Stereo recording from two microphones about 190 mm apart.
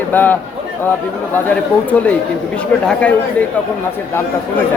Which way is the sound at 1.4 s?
10° left (ahead or behind).